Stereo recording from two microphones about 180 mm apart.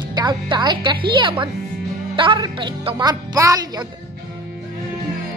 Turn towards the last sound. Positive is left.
turn(degrees=-20)  # may be behind; listen again after turning